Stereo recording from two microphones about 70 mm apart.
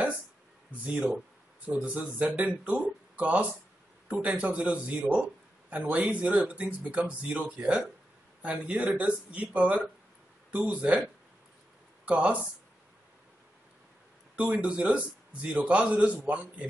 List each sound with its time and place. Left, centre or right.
0.8 s a man's voice: centre
12.1 s speech: centre
14.3 s a man's voice: centre